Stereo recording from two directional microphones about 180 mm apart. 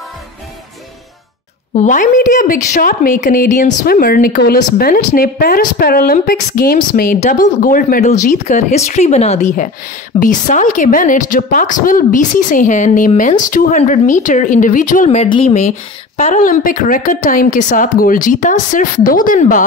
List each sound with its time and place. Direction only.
1.8 s a woman's voice: 45° left (ahead or behind)
7.2 s speech: 45° left (ahead or behind)
10.2 s a woman's voice: 45° left (ahead or behind)